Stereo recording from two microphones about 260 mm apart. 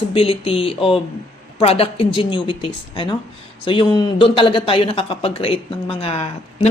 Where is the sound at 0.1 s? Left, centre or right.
Left.